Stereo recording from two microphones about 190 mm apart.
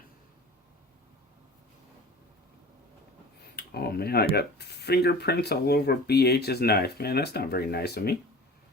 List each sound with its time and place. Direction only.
3.5 s speech: 55° left (ahead or behind)